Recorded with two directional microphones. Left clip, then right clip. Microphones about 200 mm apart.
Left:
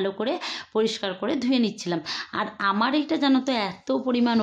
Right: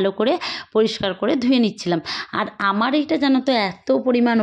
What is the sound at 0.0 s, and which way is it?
Speech, 30° right (ahead or behind).